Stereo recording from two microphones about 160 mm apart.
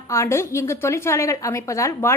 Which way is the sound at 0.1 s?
15° left (ahead or behind).